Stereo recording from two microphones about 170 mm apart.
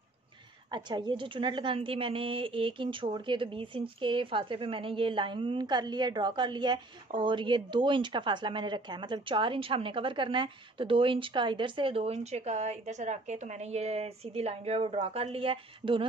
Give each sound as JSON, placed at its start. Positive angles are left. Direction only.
{"t": 0.7, "sound": "a woman's voice", "side_deg": -25}